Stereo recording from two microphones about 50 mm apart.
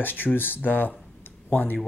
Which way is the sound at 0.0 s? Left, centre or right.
Left.